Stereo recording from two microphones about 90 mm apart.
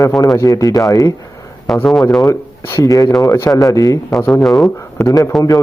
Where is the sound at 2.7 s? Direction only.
40° left (ahead or behind).